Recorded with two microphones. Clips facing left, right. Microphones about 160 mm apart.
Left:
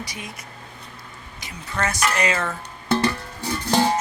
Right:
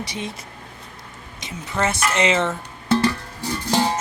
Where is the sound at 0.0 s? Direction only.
25° right (ahead or behind).